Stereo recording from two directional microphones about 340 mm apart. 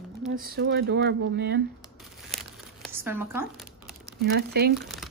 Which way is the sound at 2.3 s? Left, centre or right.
Centre.